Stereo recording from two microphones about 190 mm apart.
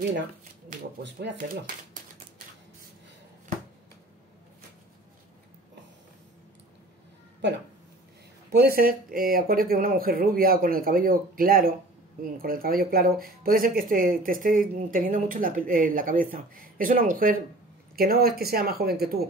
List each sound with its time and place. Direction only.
1.0 s speech: 65° right (ahead or behind)
8.5 s speech: 55° right (ahead or behind)